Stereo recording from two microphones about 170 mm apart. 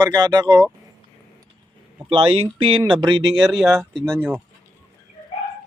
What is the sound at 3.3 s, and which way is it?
Speech, centre (ahead or behind).